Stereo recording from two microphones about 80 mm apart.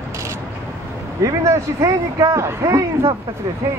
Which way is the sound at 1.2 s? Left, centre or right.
Right.